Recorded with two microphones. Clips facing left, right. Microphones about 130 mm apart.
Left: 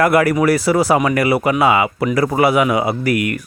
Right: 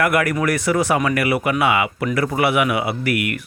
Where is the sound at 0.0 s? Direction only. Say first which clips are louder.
Left 5 dB; 35° left (ahead or behind).